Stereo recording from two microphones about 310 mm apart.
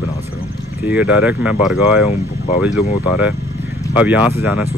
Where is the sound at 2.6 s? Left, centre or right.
Centre.